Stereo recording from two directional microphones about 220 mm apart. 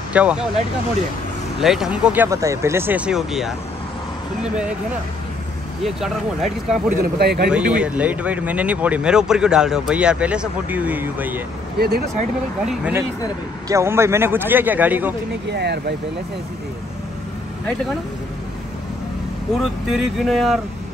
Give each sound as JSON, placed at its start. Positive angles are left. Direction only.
{"t": 0.1, "sound": "speech", "side_deg": -5}
{"t": 1.6, "sound": "speech", "side_deg": 0}
{"t": 5.9, "sound": "speech", "side_deg": 0}
{"t": 7.0, "sound": "speech", "side_deg": -45}
{"t": 7.4, "sound": "speech", "side_deg": -5}
{"t": 11.8, "sound": "speech", "side_deg": -45}
{"t": 12.6, "sound": "a man's voice", "side_deg": -5}
{"t": 15.5, "sound": "speech", "side_deg": -50}
{"t": 19.6, "sound": "speech", "side_deg": 0}